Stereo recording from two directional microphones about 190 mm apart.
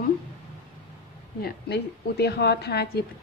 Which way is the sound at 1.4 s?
60° left (ahead or behind).